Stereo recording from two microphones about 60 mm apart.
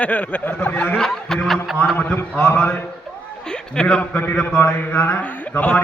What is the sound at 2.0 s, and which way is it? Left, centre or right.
Speech, left.